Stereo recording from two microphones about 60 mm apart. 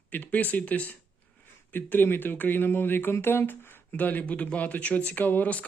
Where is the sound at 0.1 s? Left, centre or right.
Left.